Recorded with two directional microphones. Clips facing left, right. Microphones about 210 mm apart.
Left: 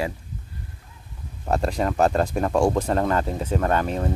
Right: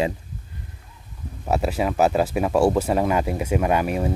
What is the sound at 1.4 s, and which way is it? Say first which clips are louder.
Speech: right 1 dB; 5° right (ahead or behind).